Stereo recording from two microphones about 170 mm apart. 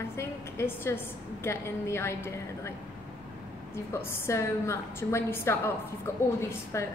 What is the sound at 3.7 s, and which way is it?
A man's voice, 15° left (ahead or behind).